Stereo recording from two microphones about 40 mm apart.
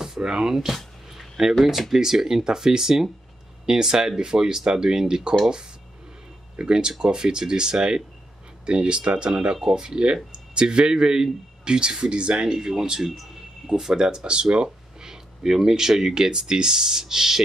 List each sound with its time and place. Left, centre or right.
0.2 s speech: centre
0.7 s a sound: centre
1.6 s speech: centre
6.5 s speech: right